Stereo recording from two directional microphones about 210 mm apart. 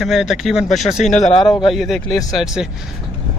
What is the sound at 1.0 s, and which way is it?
Speech, 35° left (ahead or behind).